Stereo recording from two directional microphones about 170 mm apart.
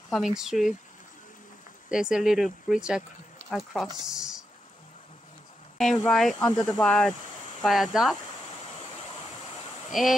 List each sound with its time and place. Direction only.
0.1 s speech: centre (ahead or behind)
1.9 s speech: 5° right (ahead or behind)
5.8 s speech: centre (ahead or behind)
9.8 s speech: centre (ahead or behind)